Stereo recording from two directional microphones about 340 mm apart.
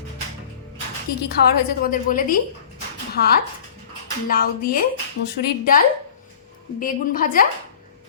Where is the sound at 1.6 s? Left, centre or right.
Left.